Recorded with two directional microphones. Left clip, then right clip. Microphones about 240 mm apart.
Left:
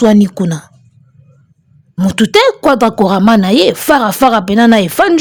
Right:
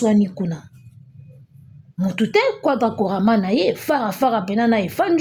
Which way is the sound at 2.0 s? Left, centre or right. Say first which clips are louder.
Left 9 dB; left.